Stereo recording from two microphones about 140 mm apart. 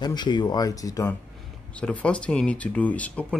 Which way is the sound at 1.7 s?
10° left (ahead or behind).